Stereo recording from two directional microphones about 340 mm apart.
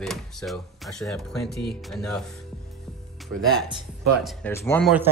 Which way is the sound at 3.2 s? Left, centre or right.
Centre.